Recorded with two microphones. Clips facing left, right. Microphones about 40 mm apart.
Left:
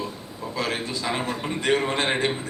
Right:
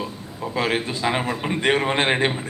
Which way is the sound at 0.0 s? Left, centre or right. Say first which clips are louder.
Right 3 dB; right.